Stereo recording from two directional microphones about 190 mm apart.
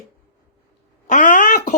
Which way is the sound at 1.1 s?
40° left (ahead or behind).